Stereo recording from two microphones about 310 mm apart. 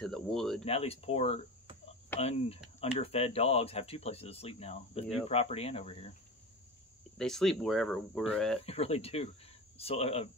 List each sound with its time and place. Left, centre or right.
0.0 s speech: centre
0.7 s speech: centre
7.2 s speech: centre
8.6 s speech: centre